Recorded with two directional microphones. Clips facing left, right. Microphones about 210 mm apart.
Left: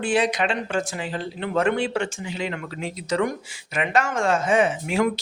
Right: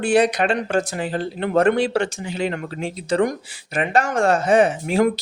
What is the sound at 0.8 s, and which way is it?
Speech, 45° right (ahead or behind).